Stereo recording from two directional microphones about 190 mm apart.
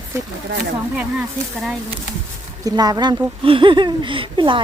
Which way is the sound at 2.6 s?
20° right (ahead or behind).